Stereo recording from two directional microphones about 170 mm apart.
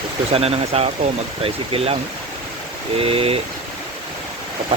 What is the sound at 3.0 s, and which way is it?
Speech, 35° right (ahead or behind).